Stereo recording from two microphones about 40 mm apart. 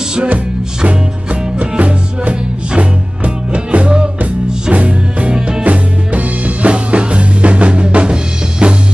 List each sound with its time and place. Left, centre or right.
0.8 s music: right